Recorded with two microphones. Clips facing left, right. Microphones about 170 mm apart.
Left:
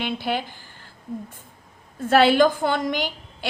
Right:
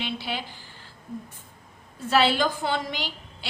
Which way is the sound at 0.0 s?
50° left (ahead or behind).